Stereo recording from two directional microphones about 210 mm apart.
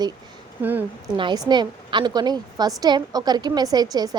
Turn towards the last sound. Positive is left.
turn(degrees=-20)  # may be behind; listen again after turning